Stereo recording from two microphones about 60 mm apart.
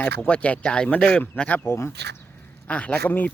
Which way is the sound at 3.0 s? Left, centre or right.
Left.